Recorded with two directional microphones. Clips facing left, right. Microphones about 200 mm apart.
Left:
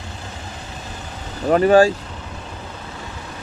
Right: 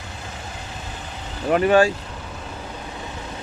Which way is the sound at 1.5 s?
35° left (ahead or behind).